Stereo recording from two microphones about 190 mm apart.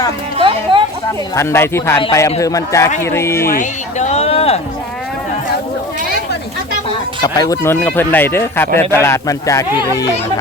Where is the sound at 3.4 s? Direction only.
45° left (ahead or behind).